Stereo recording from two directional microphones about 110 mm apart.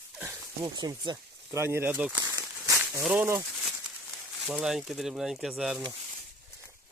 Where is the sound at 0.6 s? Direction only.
40° right (ahead or behind).